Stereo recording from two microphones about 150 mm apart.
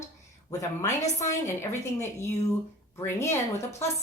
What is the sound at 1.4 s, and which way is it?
A woman's voice, 20° left (ahead or behind).